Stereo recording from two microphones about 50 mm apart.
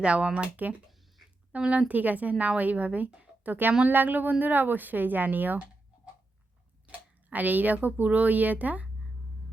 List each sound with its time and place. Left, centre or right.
0.0 s speech: right
7.3 s speech: right